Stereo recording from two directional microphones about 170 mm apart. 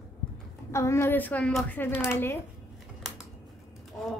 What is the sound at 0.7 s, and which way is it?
Speech, 15° left (ahead or behind).